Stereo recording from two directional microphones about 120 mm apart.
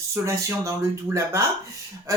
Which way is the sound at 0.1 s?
25° right (ahead or behind).